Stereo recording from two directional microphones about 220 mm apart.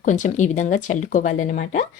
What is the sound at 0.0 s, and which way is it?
Speech, 35° left (ahead or behind).